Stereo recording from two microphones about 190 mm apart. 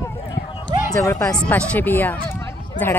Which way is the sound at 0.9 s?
15° left (ahead or behind).